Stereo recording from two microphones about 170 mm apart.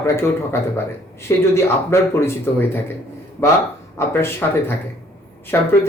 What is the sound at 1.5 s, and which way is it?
Speech, 15° left (ahead or behind).